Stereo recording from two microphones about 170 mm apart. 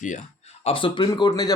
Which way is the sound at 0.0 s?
45° left (ahead or behind).